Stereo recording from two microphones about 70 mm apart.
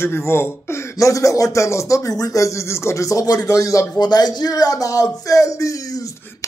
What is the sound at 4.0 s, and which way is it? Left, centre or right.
Speech, left.